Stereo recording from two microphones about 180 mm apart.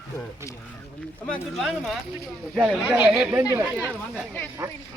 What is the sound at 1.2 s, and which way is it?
Speech, 5° left (ahead or behind).